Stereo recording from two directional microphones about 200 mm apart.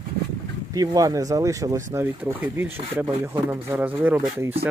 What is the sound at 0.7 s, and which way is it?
Speech, 20° right (ahead or behind).